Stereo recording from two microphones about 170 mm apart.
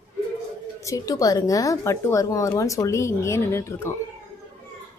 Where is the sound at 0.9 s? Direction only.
20° left (ahead or behind).